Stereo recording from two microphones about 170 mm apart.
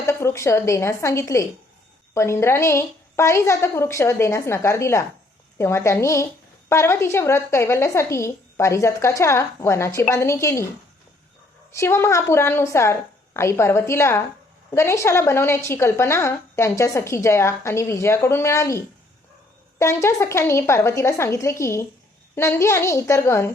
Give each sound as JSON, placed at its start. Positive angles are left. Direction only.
{"t": 0.0, "sound": "a woman's voice", "side_deg": 15}
{"t": 11.7, "sound": "a woman's voice", "side_deg": 15}
{"t": 19.8, "sound": "a woman's voice", "side_deg": 15}